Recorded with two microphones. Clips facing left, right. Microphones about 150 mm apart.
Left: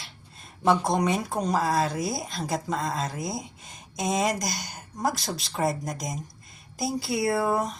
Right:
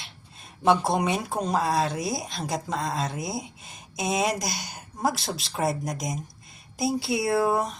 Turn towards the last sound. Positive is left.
turn(degrees=0)  # may be behind; listen again after turning